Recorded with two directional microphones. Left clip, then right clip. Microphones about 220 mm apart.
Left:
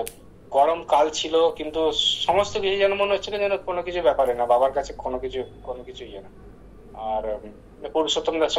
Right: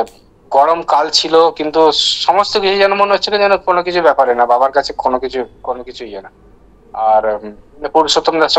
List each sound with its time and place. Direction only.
0.5 s a man's voice: 50° right (ahead or behind)
7.0 s a man's voice: 50° right (ahead or behind)